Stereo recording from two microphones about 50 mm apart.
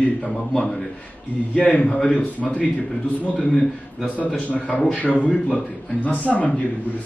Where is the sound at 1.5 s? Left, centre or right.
Left.